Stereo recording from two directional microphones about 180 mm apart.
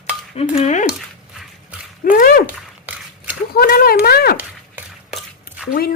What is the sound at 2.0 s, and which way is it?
Dog, 50° left (ahead or behind).